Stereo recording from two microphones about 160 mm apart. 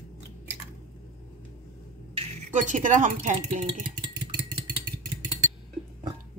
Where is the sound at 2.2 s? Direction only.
50° right (ahead or behind).